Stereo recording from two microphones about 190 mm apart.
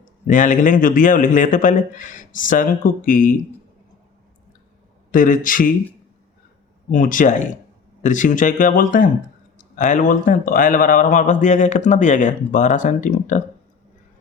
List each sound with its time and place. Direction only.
0.0 s a man's voice: 45° left (ahead or behind)
5.1 s a man's voice: 45° left (ahead or behind)
6.9 s a man's voice: 45° left (ahead or behind)